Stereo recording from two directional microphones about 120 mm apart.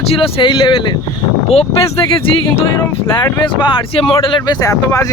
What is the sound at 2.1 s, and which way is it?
Speech, 50° left (ahead or behind).